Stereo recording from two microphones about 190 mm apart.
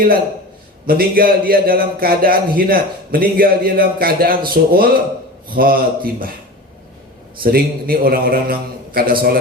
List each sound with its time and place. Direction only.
0.9 s speech: 50° right (ahead or behind)
7.4 s speech: 50° right (ahead or behind)